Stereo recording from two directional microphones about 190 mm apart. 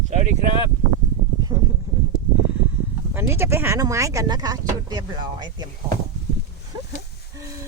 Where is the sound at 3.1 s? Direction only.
10° right (ahead or behind).